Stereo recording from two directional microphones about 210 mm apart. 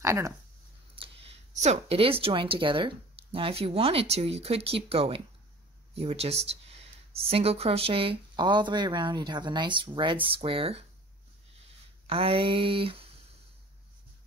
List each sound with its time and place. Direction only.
0.0 s speech: 15° right (ahead or behind)
0.9 s a sound: 25° right (ahead or behind)
1.6 s speech: 30° right (ahead or behind)
12.1 s speech: 25° right (ahead or behind)